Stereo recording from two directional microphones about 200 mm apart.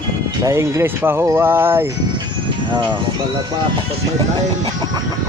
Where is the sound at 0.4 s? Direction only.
15° right (ahead or behind).